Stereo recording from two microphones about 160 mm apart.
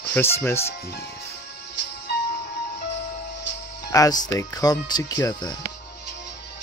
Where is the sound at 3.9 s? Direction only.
25° left (ahead or behind).